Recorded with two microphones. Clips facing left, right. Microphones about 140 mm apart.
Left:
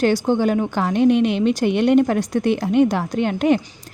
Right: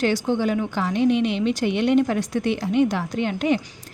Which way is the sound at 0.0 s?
45° left (ahead or behind).